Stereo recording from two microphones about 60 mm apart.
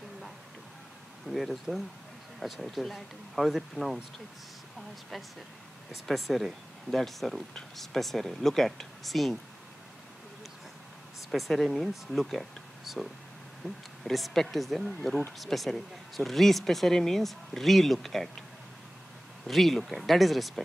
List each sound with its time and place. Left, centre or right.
1.2 s speech: centre
5.9 s speech: centre
11.2 s speech: centre
19.4 s speech: centre